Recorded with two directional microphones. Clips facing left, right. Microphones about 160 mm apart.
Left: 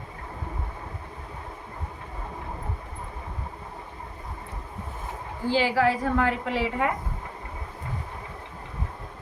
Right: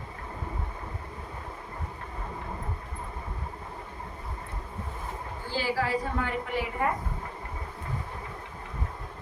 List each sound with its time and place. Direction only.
5.5 s a woman's voice: 90° left